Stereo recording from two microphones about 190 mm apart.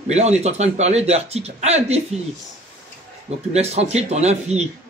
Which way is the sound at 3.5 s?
35° right (ahead or behind).